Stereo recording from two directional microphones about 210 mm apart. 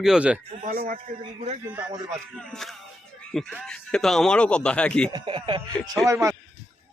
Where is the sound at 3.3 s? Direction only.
5° left (ahead or behind).